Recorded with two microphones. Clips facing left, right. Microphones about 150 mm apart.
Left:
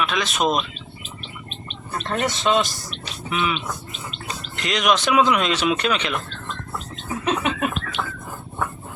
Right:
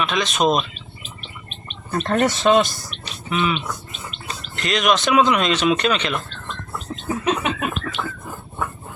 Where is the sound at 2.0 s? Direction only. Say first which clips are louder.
Right 5 dB; 50° right (ahead or behind).